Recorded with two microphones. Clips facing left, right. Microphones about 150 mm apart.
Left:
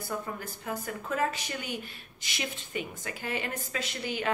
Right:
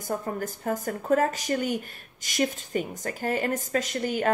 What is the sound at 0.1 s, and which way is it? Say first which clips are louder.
A woman's voice: right 7 dB; 45° right (ahead or behind).